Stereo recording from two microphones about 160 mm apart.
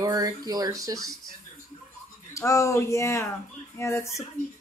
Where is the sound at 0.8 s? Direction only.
20° right (ahead or behind).